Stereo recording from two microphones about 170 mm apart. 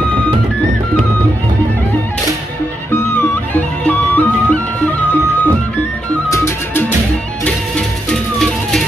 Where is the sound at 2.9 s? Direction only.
10° left (ahead or behind).